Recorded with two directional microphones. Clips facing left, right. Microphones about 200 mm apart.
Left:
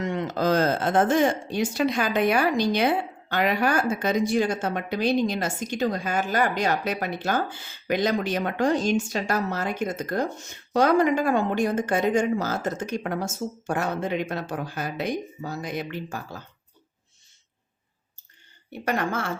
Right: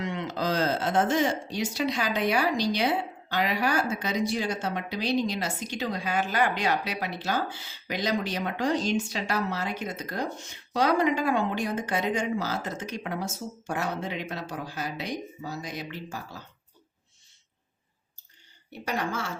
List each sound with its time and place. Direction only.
0.0 s speech: 45° left (ahead or behind)
18.7 s a woman's voice: 55° left (ahead or behind)